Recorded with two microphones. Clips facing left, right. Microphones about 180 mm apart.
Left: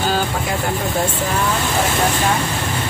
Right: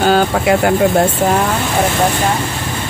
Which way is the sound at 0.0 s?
70° right (ahead or behind).